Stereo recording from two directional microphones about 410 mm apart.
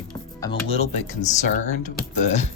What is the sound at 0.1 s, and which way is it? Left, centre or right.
Speech, centre.